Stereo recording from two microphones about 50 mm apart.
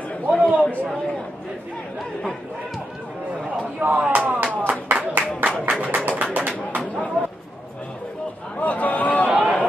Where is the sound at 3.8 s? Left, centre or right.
Right.